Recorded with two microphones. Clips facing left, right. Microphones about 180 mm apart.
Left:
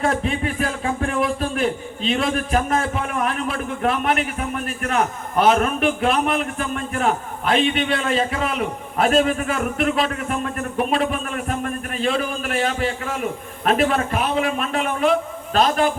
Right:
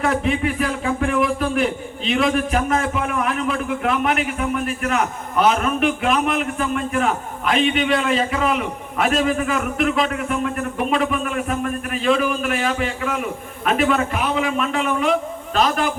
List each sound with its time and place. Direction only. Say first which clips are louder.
0.0 s music: right 2 dB; 30° left (ahead or behind)
2.0 s a man's voice: right 2 dB; 30° left (ahead or behind)